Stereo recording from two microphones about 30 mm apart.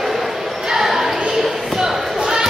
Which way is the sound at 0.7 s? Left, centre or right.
Centre.